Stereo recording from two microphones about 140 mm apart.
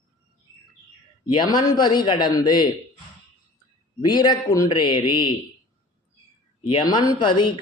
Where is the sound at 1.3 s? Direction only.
35° left (ahead or behind).